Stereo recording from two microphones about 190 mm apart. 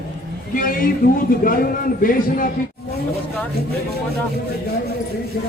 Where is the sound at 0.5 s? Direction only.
45° left (ahead or behind).